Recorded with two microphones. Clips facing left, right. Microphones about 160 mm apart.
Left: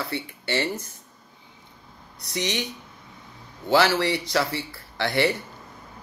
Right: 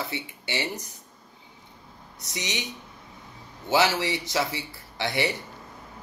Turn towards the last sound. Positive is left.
turn(degrees=-20)  # may be behind; listen again after turning